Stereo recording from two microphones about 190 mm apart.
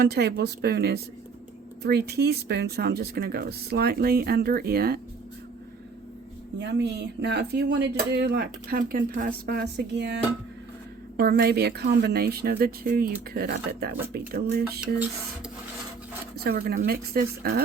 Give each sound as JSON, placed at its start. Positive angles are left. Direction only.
{"t": 0.0, "sound": "speech", "side_deg": -60}
{"t": 6.6, "sound": "speech", "side_deg": -65}
{"t": 11.2, "sound": "speech", "side_deg": -55}
{"t": 16.4, "sound": "speech", "side_deg": -55}